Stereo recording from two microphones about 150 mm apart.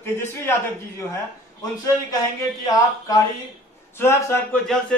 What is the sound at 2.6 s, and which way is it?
A man's voice, 25° left (ahead or behind).